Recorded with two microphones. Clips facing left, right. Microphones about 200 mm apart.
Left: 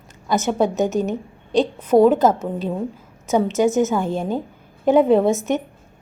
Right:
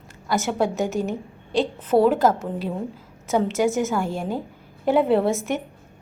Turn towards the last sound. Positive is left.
turn(degrees=20)  # may be behind; listen again after turning